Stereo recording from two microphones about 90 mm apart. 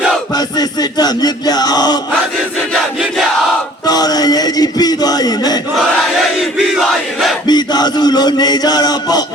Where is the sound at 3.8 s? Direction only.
45° left (ahead or behind).